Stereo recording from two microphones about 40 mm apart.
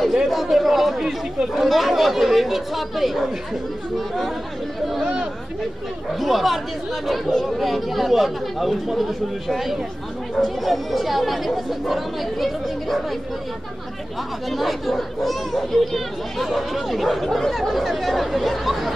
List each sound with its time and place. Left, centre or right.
0.0 s speech: centre
5.0 s chatter: centre
6.0 s speech: centre
14.5 s speech: centre